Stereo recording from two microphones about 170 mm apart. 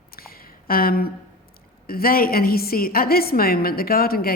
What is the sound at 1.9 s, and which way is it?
A woman's voice, 60° left (ahead or behind).